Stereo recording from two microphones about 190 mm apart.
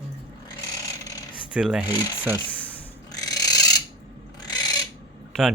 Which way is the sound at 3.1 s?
20° left (ahead or behind).